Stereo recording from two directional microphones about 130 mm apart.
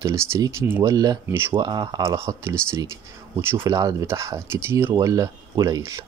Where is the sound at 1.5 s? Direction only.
35° right (ahead or behind).